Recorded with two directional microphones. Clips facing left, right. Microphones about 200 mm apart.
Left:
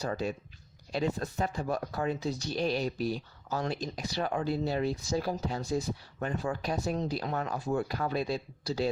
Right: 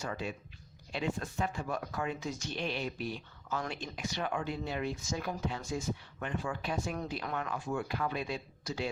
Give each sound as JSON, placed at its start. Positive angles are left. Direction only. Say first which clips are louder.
{"t": 0.0, "sound": "speech", "louder": "left 5 dB", "side_deg": 40}